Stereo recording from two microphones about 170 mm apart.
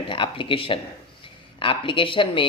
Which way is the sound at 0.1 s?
30° left (ahead or behind).